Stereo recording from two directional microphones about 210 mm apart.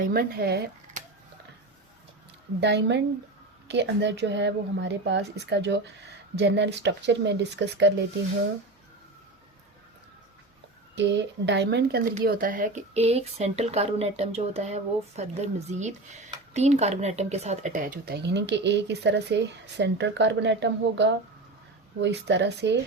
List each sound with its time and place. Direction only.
0.1 s speech: 45° right (ahead or behind)
2.6 s speech: 55° right (ahead or behind)
10.9 s speech: 55° right (ahead or behind)